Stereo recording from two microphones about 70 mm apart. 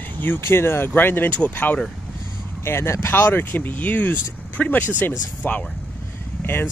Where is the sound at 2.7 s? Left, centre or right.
Left.